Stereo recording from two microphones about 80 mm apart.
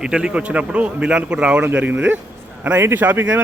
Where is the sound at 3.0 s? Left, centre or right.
Centre.